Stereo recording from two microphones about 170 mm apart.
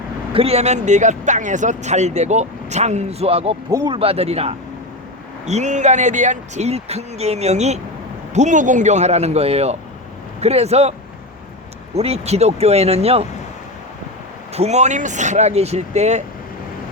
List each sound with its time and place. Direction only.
0.3 s speech: 35° right (ahead or behind)
3.7 s speech: 20° right (ahead or behind)
3.9 s speech: 35° right (ahead or behind)
11.9 s speech: 35° right (ahead or behind)
14.5 s speech: 40° right (ahead or behind)